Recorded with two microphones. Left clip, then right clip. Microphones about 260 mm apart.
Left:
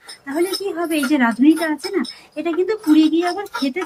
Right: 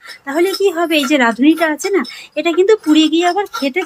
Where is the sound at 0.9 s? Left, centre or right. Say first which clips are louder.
Right 5 dB; right.